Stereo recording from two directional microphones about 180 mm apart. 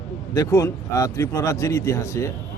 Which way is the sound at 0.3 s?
15° left (ahead or behind).